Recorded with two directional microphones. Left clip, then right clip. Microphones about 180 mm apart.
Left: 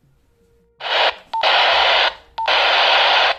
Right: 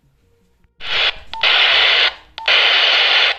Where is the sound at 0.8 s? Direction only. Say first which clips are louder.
Even; 45° left (ahead or behind).